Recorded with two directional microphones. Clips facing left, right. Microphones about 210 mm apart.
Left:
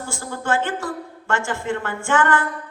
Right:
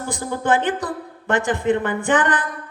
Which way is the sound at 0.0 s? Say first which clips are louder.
Right 4 dB; 20° right (ahead or behind).